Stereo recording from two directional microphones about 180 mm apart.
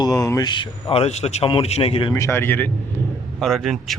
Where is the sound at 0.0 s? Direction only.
20° left (ahead or behind).